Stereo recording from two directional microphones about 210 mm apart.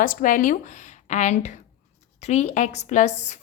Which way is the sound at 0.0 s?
40° left (ahead or behind).